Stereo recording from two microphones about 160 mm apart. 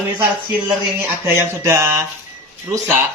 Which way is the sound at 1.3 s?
15° right (ahead or behind).